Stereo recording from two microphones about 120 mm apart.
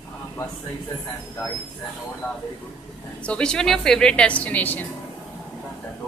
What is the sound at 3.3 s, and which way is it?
A woman's voice, 5° left (ahead or behind).